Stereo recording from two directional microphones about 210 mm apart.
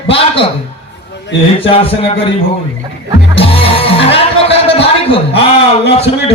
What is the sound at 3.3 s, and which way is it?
Music, 25° left (ahead or behind).